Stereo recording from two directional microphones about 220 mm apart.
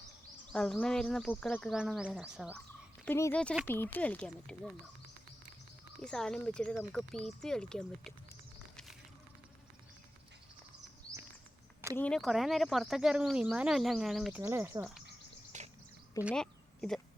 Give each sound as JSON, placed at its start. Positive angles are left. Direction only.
{"t": 0.5, "sound": "speech", "side_deg": 5}
{"t": 3.1, "sound": "speech", "side_deg": 10}
{"t": 6.0, "sound": "speech", "side_deg": 5}
{"t": 11.9, "sound": "speech", "side_deg": 5}
{"t": 14.4, "sound": "speech", "side_deg": -10}
{"t": 15.5, "sound": "a sound", "side_deg": -35}
{"t": 16.2, "sound": "a sound", "side_deg": 5}